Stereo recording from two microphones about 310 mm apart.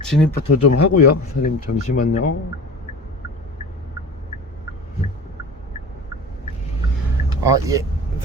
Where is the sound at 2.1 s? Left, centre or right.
Left.